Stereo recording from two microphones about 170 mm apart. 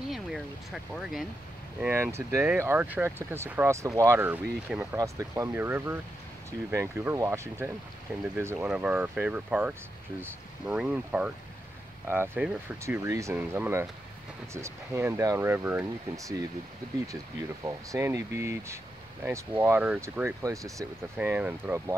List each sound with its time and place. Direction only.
0.1 s a sound: centre (ahead or behind)
1.8 s speech: 10° right (ahead or behind)
17.6 s speech: 20° right (ahead or behind)